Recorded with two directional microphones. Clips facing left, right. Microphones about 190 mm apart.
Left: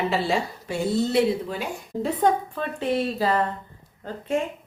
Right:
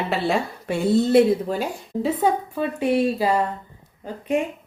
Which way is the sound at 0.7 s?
60° right (ahead or behind).